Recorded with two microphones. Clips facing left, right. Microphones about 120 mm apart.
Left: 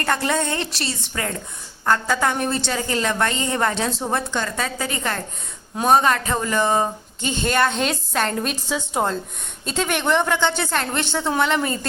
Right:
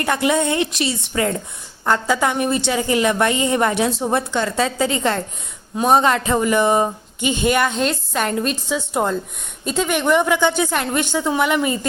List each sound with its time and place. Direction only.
0.0 s a woman's voice: 15° right (ahead or behind)
7.8 s a woman's voice: centre (ahead or behind)